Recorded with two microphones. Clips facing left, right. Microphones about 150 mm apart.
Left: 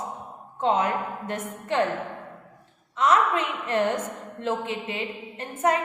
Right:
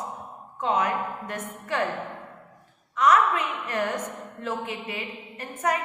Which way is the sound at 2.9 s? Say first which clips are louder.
Right 1 dB; 25° left (ahead or behind).